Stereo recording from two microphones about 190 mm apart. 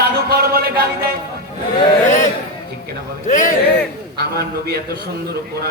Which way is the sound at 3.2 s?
40° left (ahead or behind).